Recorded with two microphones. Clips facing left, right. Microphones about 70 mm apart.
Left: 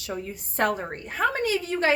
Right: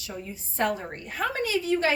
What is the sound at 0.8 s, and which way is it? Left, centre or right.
Speech, left.